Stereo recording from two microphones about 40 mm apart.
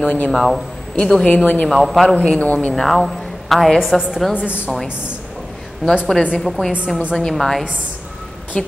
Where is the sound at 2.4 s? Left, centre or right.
Left.